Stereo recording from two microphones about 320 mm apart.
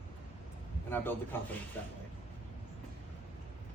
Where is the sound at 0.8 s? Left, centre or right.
Centre.